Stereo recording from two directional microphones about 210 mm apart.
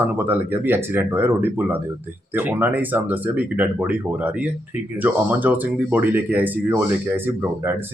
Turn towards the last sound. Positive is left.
turn(degrees=-10)  # may be behind; listen again after turning